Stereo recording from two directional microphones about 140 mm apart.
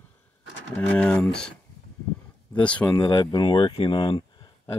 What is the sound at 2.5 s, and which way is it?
Speech, 10° left (ahead or behind).